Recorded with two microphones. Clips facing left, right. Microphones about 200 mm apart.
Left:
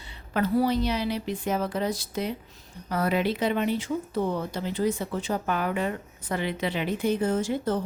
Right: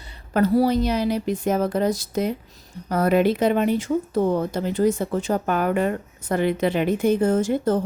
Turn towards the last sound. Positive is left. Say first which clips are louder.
# right 6 dB
turn(degrees=-45)  # may be behind; listen again after turning